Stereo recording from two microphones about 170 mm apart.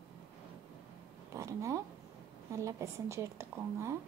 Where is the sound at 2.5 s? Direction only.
15° right (ahead or behind).